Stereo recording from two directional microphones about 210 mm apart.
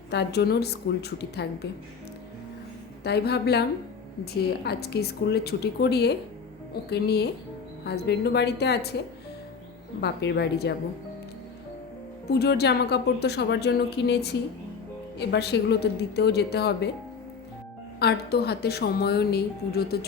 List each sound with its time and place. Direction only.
0.1 s a woman's voice: 50° left (ahead or behind)
3.0 s a woman's voice: 50° left (ahead or behind)
10.0 s a woman's voice: 55° left (ahead or behind)
12.4 s a woman's voice: 50° left (ahead or behind)
18.0 s a woman's voice: 50° left (ahead or behind)